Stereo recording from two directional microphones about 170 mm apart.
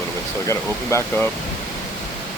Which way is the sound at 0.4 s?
15° left (ahead or behind).